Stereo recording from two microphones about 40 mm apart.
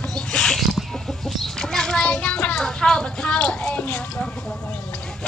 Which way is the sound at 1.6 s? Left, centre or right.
Centre.